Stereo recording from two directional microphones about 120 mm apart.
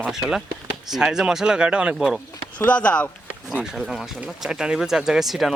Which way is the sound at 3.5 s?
5° right (ahead or behind).